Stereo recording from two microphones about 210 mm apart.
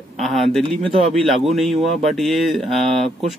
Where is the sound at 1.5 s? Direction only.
Centre (ahead or behind).